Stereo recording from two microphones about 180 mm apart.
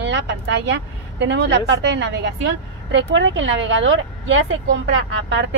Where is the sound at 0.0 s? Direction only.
80° right.